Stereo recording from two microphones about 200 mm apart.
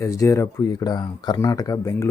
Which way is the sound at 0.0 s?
15° left (ahead or behind).